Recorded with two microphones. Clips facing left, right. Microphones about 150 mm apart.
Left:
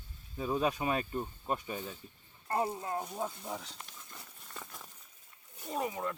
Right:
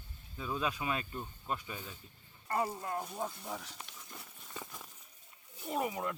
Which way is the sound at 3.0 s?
15° left (ahead or behind).